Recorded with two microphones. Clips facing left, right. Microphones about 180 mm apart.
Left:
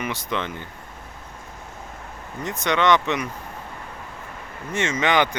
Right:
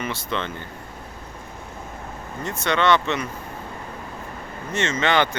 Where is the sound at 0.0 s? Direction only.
15° left (ahead or behind).